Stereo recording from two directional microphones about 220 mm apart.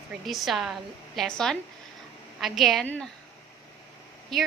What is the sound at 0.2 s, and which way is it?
A woman's voice, centre (ahead or behind).